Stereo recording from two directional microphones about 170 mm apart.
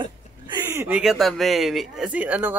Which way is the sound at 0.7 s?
15° right (ahead or behind).